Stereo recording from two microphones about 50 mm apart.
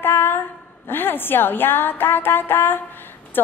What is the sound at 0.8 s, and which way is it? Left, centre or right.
A woman's voice, left.